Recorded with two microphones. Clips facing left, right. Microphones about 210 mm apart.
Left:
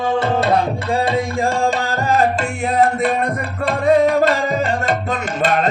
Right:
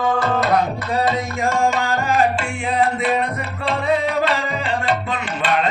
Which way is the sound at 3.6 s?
45° left (ahead or behind).